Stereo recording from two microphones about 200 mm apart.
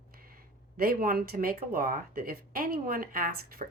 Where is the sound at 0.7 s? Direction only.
45° right (ahead or behind).